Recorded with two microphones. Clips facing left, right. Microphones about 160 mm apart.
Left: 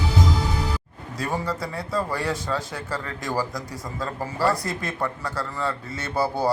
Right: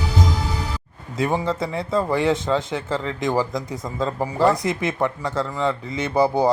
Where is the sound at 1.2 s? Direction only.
20° right (ahead or behind).